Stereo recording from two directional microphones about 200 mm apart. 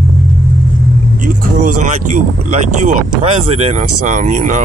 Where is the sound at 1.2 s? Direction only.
40° right (ahead or behind).